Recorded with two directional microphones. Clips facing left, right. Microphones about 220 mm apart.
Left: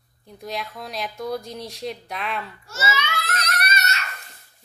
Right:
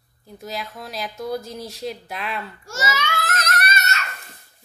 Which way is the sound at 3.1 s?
45° right (ahead or behind).